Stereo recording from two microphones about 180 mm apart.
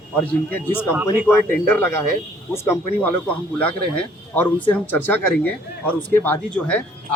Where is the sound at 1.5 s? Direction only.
10° left (ahead or behind).